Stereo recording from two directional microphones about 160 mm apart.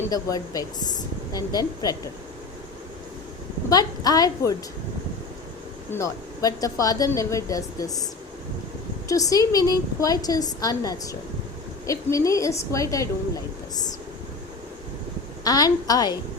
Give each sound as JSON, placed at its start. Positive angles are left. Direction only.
{"t": 0.1, "sound": "a woman's voice", "side_deg": 20}
{"t": 3.7, "sound": "a woman's voice", "side_deg": 25}
{"t": 5.9, "sound": "a woman's voice", "side_deg": 20}
{"t": 9.0, "sound": "a woman's voice", "side_deg": 20}
{"t": 15.4, "sound": "a woman's voice", "side_deg": 25}